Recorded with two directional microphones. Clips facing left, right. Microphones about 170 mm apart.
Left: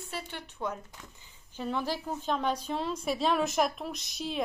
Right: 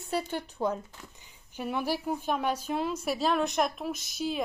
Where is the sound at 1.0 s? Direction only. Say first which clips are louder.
Right 1 dB; 15° right (ahead or behind).